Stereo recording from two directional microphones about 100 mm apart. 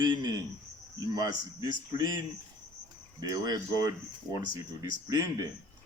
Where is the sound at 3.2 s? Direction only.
40° right (ahead or behind).